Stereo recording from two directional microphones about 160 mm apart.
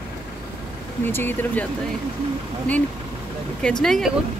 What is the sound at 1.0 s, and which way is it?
Speech, 15° left (ahead or behind).